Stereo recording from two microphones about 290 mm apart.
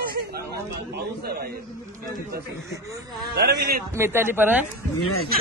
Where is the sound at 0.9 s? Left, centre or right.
Right.